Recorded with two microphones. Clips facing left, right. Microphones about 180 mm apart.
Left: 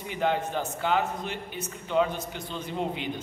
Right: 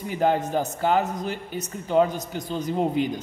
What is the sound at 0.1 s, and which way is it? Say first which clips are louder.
A woman's voice: right 5 dB; 40° right (ahead or behind).